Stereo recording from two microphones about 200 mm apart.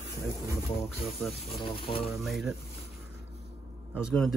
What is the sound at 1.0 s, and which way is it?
Speech, centre (ahead or behind).